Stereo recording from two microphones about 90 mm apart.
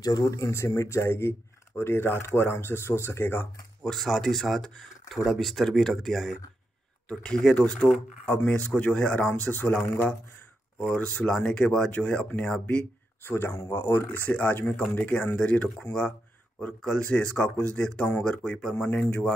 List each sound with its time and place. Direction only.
0.0 s speech: 40° left (ahead or behind)
3.8 s speech: centre (ahead or behind)